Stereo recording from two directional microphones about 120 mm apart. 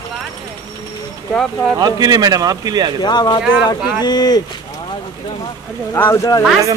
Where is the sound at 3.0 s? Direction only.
35° left (ahead or behind).